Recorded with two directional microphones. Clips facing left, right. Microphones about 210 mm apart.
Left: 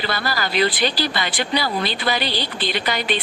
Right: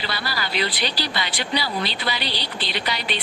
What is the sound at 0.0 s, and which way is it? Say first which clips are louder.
Speech: left 5 dB; 50° left (ahead or behind).